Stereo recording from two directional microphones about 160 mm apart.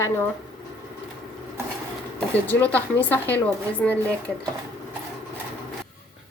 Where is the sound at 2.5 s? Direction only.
10° left (ahead or behind).